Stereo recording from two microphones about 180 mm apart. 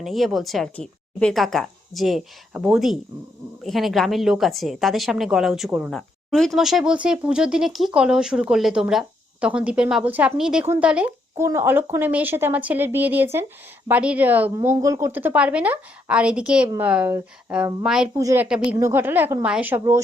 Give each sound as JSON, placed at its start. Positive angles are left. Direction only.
{"t": 0.0, "sound": "a woman's voice", "side_deg": 0}
{"t": 18.2, "sound": "a woman's voice", "side_deg": -20}